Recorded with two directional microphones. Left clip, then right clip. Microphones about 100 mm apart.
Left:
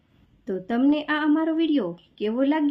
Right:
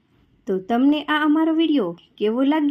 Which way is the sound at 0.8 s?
40° right (ahead or behind).